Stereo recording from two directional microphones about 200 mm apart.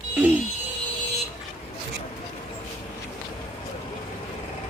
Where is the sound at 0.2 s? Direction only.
10° right (ahead or behind).